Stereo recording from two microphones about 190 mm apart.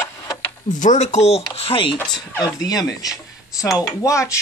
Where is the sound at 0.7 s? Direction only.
40° left (ahead or behind).